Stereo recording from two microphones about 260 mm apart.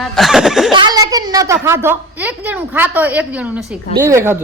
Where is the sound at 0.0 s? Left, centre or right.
Centre.